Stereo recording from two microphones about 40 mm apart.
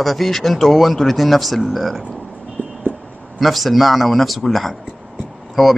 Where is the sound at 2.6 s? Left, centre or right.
Right.